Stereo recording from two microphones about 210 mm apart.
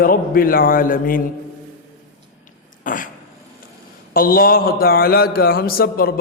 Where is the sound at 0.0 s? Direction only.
40° left (ahead or behind).